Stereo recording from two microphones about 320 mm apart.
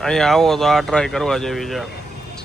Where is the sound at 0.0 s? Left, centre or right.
Centre.